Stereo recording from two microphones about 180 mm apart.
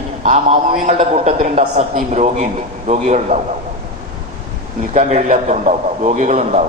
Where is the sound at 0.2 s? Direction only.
40° right (ahead or behind).